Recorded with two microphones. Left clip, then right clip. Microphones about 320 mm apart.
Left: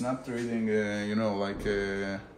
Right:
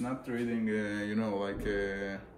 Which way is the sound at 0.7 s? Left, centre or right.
Centre.